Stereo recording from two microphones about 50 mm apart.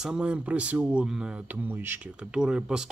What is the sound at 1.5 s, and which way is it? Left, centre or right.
Speech, right.